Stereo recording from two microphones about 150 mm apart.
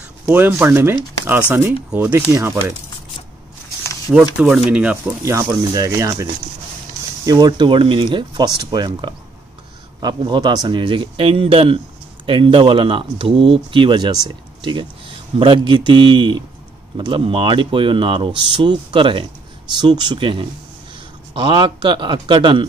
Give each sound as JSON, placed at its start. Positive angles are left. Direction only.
{"t": 0.3, "sound": "speech", "side_deg": -15}
{"t": 4.1, "sound": "speech", "side_deg": -5}
{"t": 5.2, "sound": "speech", "side_deg": -20}
{"t": 7.2, "sound": "speech", "side_deg": -30}